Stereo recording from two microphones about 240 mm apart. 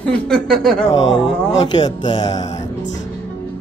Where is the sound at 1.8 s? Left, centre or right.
Centre.